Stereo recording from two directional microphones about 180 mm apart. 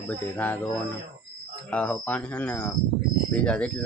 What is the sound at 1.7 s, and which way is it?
Speech, 10° left (ahead or behind).